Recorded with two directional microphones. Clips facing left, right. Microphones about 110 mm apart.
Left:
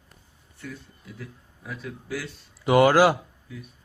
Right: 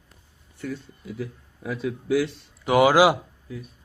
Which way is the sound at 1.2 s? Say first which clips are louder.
Right 9 dB; 85° right.